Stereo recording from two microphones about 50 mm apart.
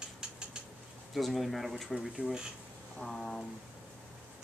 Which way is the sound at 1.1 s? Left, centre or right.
Centre.